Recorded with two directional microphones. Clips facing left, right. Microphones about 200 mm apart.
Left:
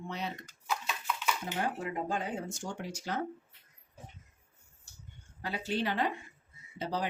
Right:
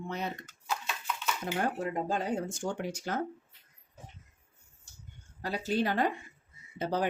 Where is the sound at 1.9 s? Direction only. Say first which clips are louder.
Right 3 dB; 40° right (ahead or behind).